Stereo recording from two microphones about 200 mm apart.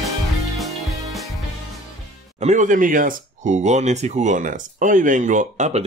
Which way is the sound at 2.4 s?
40° right (ahead or behind).